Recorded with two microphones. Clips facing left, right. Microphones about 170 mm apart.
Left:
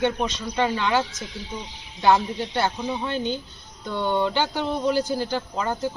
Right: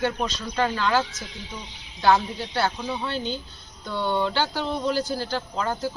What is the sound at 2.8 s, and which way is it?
Speech, 15° left (ahead or behind).